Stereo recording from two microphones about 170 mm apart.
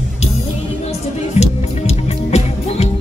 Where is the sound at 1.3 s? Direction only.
40° left (ahead or behind).